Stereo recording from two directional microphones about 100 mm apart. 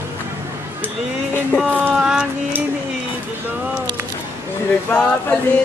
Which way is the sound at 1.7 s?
15° right (ahead or behind).